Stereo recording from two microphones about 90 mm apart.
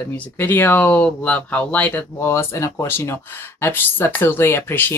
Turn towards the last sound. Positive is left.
turn(degrees=25)  # may be behind; listen again after turning